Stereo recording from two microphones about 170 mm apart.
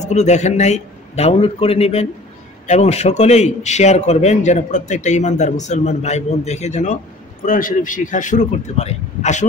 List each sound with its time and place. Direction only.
0.0 s a man's voice: 40° left (ahead or behind)